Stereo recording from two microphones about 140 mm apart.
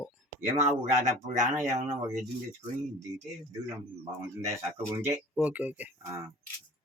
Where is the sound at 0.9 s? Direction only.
60° right (ahead or behind).